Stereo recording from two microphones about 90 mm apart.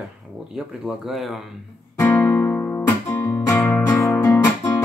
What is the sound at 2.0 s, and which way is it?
Guitar, 30° left (ahead or behind).